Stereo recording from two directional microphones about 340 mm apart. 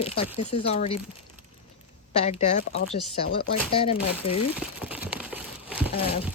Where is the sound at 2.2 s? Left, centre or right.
Centre.